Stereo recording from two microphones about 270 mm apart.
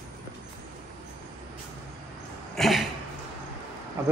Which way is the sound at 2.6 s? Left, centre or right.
Centre.